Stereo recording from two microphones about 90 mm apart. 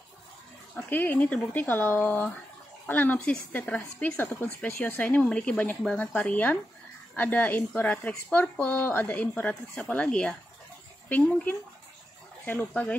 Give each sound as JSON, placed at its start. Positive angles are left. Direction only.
{"t": 0.7, "sound": "speech", "side_deg": 20}